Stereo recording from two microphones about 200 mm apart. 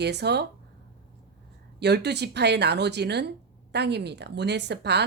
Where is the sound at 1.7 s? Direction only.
55° right (ahead or behind).